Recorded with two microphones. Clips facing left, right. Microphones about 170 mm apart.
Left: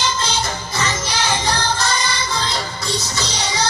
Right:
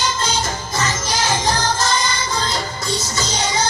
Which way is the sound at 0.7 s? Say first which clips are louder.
Right 1 dB; 45° right (ahead or behind).